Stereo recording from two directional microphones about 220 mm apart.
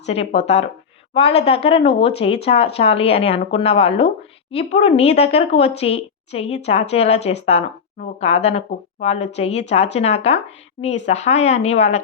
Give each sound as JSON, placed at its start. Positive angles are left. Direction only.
{"t": 0.0, "sound": "a woman's voice", "side_deg": 30}